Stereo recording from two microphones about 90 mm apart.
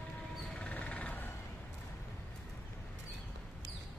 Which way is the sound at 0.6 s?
15° left (ahead or behind).